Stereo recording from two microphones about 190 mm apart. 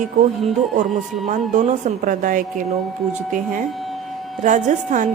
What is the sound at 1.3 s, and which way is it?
A woman's voice, 40° right (ahead or behind).